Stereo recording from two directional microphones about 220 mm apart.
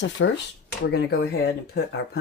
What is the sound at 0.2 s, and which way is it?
Speech, 60° left (ahead or behind).